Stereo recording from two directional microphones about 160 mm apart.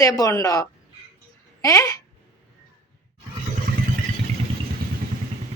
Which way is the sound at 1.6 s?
20° left (ahead or behind).